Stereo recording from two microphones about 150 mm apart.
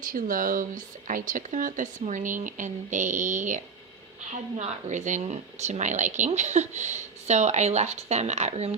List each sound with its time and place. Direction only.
0.1 s a woman's voice: 65° right (ahead or behind); by 8.7 s 45° right (ahead or behind)